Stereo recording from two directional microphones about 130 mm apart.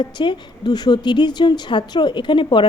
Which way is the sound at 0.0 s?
35° left (ahead or behind).